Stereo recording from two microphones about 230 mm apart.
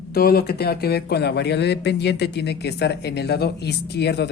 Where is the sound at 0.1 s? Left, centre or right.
Left.